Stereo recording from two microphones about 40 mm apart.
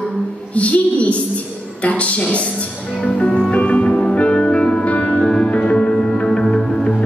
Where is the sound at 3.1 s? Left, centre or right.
Left.